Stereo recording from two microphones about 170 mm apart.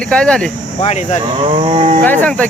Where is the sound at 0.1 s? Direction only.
5° left (ahead or behind).